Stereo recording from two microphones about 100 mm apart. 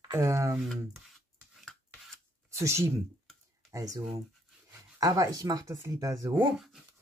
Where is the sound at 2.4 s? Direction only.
30° right (ahead or behind).